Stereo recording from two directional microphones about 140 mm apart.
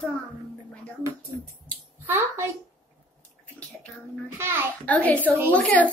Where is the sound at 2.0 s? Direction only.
15° right (ahead or behind).